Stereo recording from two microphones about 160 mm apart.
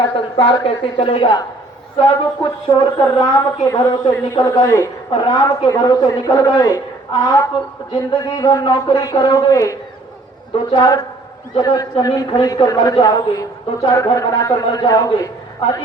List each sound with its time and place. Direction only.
0.0 s a woman's voice: 35° left (ahead or behind)